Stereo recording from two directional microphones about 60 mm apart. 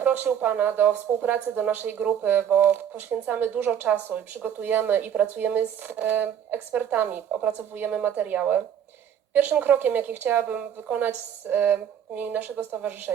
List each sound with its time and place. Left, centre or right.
0.0 s speech: right